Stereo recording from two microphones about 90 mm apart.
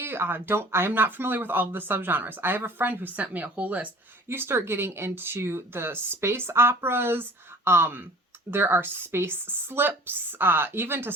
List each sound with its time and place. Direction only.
0.0 s speech: 25° right (ahead or behind)
4.3 s speech: 25° right (ahead or behind)